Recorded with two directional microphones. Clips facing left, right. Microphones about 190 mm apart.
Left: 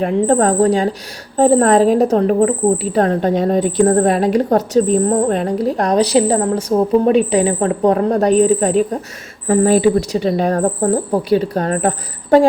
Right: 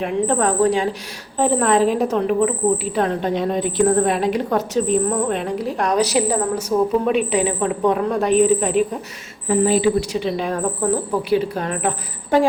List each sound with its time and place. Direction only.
0.0 s a woman's voice: 40° left (ahead or behind)
9.5 s a woman's voice: 50° left (ahead or behind)